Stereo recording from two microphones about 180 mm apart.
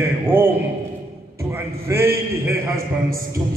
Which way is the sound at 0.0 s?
15° right (ahead or behind).